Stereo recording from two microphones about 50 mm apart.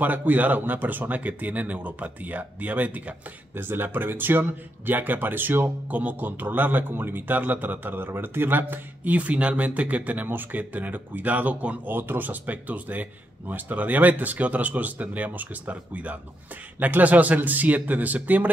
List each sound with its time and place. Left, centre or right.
0.0 s speech: right
5.9 s speech: right
11.9 s speech: right